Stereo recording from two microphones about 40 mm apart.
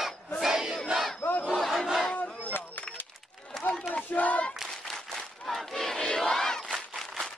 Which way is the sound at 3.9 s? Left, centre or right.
Left.